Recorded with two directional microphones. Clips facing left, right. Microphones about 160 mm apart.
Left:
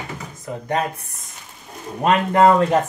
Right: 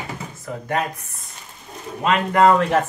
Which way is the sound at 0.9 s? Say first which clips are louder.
Even; 35° left (ahead or behind).